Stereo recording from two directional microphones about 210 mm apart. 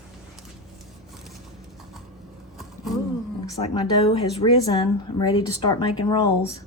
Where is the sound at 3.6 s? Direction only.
25° left (ahead or behind).